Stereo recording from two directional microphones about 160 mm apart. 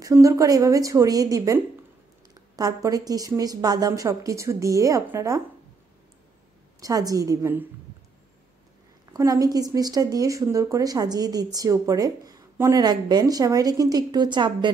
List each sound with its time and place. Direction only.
0.0 s speech: 20° right (ahead or behind)
6.8 s speech: 20° right (ahead or behind)
9.1 s speech: 25° right (ahead or behind)